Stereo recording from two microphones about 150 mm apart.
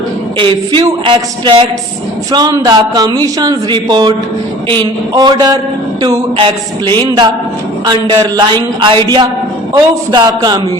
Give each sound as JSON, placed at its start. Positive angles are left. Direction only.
{"t": 0.3, "sound": "speech", "side_deg": -30}